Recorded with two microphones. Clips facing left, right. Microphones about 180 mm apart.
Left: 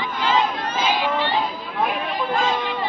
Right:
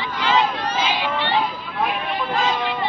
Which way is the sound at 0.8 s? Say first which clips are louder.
Left 3 dB; 45° left (ahead or behind).